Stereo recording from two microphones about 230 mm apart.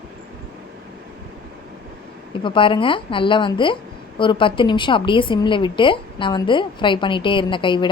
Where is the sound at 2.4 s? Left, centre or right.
Left.